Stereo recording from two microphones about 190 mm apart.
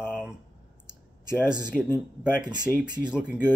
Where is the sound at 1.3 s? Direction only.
5° right (ahead or behind).